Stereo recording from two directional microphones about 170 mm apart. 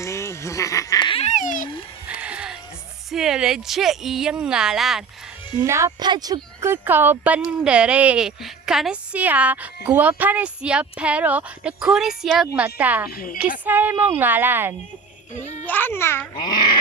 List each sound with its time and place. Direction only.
0.0 s music: 15° left (ahead or behind)
1.2 s babbling: 45° left (ahead or behind)
2.0 s music: 5° right (ahead or behind)
3.1 s speech: centre (ahead or behind)
5.5 s speech: 15° right (ahead or behind)
13.1 s a woman's voice: 60° left (ahead or behind)
13.7 s speech: 10° right (ahead or behind)
15.6 s a child's voice: 10° left (ahead or behind)
16.5 s dog: 25° left (ahead or behind)